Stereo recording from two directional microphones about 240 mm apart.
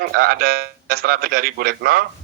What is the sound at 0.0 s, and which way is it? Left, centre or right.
A man's voice, right.